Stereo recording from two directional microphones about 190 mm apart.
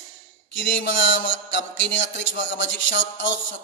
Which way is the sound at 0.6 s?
75° left (ahead or behind).